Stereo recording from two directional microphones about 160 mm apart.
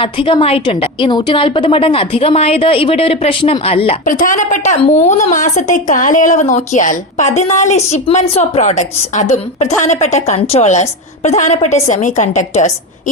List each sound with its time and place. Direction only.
0.0 s a woman's voice: 30° left (ahead or behind)
4.0 s a woman's voice: 55° left (ahead or behind)